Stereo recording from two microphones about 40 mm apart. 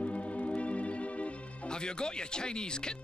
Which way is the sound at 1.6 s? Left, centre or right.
Left.